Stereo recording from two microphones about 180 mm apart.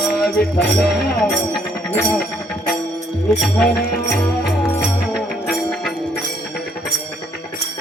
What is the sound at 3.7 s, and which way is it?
Music, 60° left (ahead or behind).